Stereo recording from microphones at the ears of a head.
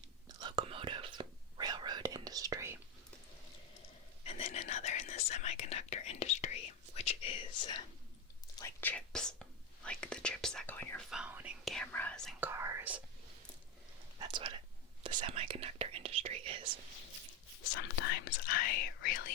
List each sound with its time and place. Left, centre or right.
0.3 s whispering: right
3.8 s whispering: left
9.0 s whispering: centre
14.2 s whispering: right
17.6 s whispering: left